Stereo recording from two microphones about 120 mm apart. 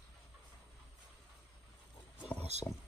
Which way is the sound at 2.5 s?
65° right (ahead or behind).